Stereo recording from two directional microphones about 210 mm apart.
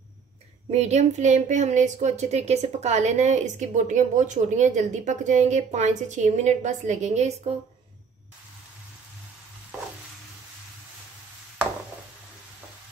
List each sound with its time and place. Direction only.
0.7 s speech: 30° right (ahead or behind)